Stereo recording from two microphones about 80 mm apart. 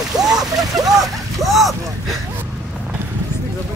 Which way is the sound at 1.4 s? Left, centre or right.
Centre.